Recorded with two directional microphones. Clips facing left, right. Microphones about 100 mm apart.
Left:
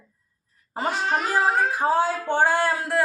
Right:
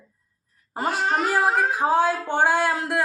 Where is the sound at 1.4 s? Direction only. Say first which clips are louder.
Left 1 dB; 15° right (ahead or behind).